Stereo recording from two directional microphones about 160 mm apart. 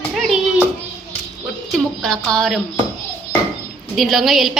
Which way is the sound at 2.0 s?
5° left (ahead or behind).